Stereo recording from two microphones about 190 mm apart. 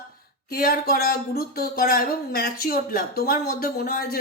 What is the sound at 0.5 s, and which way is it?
Speech, 50° left (ahead or behind).